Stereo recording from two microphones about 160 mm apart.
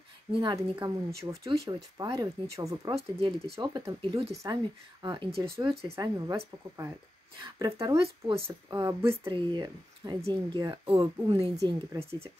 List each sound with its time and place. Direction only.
0.3 s speech: 30° right (ahead or behind)
5.9 s speech: 20° right (ahead or behind); by 11.5 s 35° right (ahead or behind)
11.5 s speech: 20° right (ahead or behind)
12.0 s speech: 40° right (ahead or behind)